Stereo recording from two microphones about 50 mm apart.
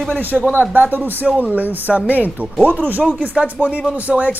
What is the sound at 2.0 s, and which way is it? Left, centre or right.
Speech, left.